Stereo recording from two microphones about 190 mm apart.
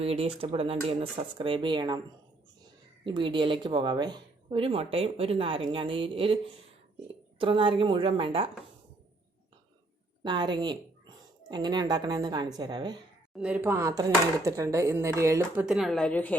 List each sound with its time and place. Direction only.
0.0 s a woman's voice: 30° right (ahead or behind)
3.0 s a woman's voice: 25° right (ahead or behind)
10.2 s a woman's voice: 25° right (ahead or behind)
13.3 s speech: 5° right (ahead or behind)